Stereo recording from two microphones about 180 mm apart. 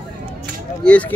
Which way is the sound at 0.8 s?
5° left (ahead or behind).